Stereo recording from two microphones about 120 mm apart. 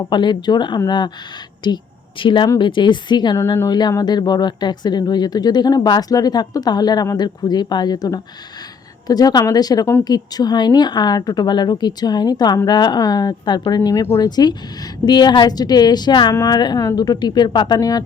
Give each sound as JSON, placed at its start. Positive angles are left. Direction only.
{"t": 0.1, "sound": "a woman's voice", "side_deg": 40}
{"t": 3.3, "sound": "speech", "side_deg": 25}
{"t": 3.7, "sound": "speech", "side_deg": 35}